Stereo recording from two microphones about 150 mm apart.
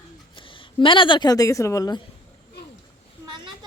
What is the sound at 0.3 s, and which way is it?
Speech, 35° left (ahead or behind).